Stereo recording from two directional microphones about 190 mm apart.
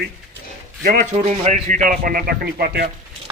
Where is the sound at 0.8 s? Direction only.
45° right (ahead or behind).